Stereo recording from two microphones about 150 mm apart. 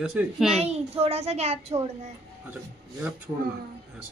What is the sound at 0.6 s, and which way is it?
A child's voice, 45° right (ahead or behind).